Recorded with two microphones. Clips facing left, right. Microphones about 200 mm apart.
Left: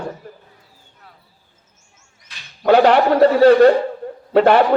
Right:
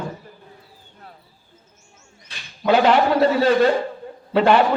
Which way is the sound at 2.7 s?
65° left (ahead or behind).